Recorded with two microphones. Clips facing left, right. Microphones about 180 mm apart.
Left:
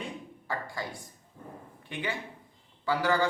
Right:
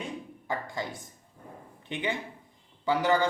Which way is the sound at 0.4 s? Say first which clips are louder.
Right 2 dB; 20° right (ahead or behind).